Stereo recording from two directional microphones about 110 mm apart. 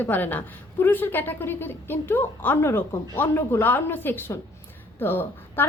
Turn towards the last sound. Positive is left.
turn(degrees=20)  # may be behind; listen again after turning